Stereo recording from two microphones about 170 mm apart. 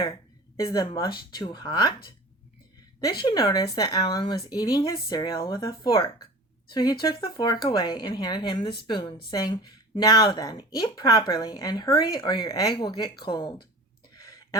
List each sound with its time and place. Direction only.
0.6 s a woman's voice: 25° left (ahead or behind)
3.2 s a woman's voice: 25° left (ahead or behind)
14.2 s a sound: 20° left (ahead or behind)